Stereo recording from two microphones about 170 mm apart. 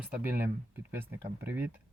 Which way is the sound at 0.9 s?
10° right (ahead or behind).